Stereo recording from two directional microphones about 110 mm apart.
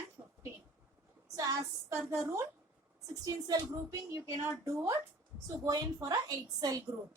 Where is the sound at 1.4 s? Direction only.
30° right (ahead or behind).